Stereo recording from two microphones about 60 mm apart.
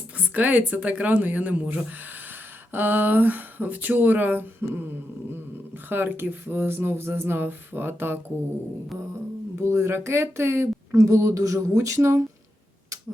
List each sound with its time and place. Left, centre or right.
0.3 s speech: right
2.7 s speech: right
5.9 s speech: right
9.6 s speech: right
10.9 s speech: right